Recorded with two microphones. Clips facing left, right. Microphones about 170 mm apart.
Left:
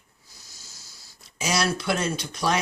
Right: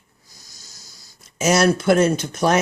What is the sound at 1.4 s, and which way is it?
Speech, 50° right (ahead or behind).